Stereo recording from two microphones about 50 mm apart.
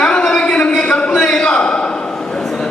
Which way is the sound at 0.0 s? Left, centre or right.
Centre.